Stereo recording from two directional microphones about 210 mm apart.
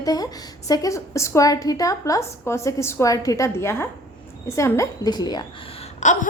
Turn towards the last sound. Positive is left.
turn(degrees=35)  # may be behind; listen again after turning